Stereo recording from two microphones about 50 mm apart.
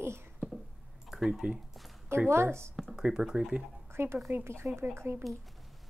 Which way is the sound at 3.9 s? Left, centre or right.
Right.